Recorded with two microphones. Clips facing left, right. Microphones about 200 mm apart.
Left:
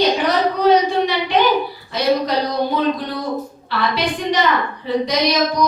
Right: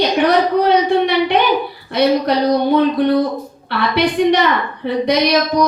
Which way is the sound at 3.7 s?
60° right (ahead or behind).